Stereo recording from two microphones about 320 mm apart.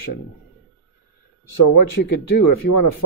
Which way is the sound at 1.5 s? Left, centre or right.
Left.